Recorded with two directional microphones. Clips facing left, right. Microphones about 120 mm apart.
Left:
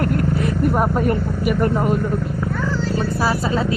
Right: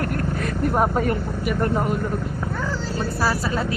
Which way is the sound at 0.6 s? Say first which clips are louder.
Left 1 dB; centre (ahead or behind).